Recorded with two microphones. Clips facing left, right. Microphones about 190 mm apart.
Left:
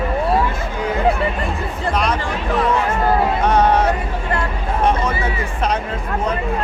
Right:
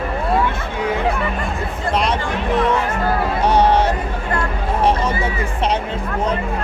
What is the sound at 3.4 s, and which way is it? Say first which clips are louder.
Music: right 3 dB; 30° right (ahead or behind).